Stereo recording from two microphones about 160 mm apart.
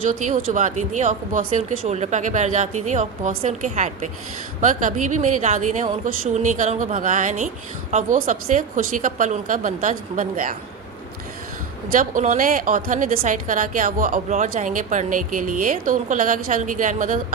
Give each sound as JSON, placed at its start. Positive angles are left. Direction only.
{"t": 0.0, "sound": "speech", "side_deg": -55}
{"t": 11.9, "sound": "a woman's voice", "side_deg": -55}